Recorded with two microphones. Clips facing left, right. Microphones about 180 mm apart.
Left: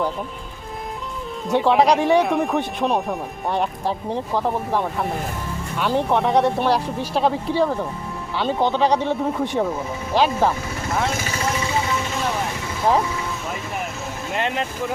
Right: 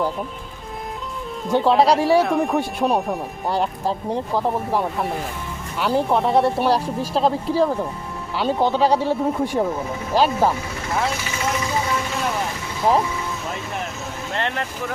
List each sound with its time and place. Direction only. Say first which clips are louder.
1.5 s speech: even; centre (ahead or behind)
14.3 s speech: left 2 dB; 15° left (ahead or behind)